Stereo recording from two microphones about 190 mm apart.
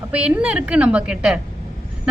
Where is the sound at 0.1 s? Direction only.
5° right (ahead or behind).